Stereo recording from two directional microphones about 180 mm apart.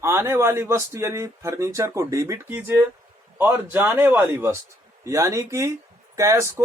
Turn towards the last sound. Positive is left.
turn(degrees=-15)  # may be behind; listen again after turning